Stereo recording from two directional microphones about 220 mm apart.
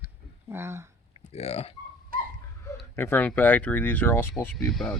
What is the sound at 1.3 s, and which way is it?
Speech, 30° left (ahead or behind).